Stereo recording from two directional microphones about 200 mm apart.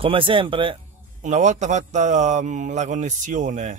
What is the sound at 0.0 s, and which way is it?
Speech, 25° right (ahead or behind).